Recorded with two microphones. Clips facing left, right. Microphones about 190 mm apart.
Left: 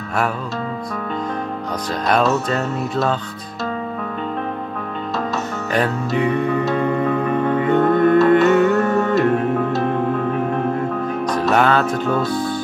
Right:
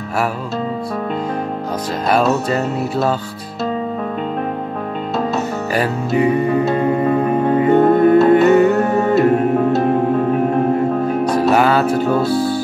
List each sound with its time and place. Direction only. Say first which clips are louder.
2.5 s music: right 3 dB; 5° right (ahead or behind)
5.7 s music: even; 5° right (ahead or behind)
11.3 s music: right 2 dB; 5° right (ahead or behind)
12.2 s speech: right 4 dB; 30° right (ahead or behind)